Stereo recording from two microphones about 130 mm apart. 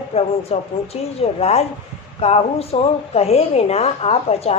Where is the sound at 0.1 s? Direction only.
50° left (ahead or behind).